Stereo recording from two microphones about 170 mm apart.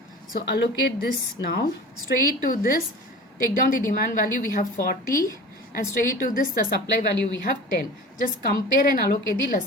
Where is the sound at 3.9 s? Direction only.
55° left (ahead or behind).